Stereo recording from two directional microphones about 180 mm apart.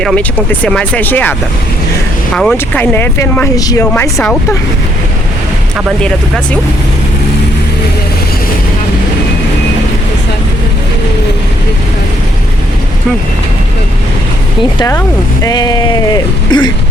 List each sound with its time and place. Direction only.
0.0 s speech: 5° left (ahead or behind)
6.0 s speech: 5° left (ahead or behind)
14.8 s speech: 15° left (ahead or behind)